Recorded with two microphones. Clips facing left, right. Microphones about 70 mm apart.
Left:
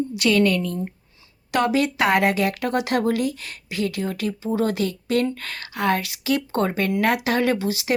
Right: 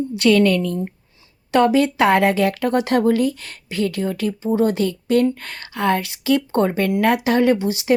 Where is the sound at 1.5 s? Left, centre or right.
Right.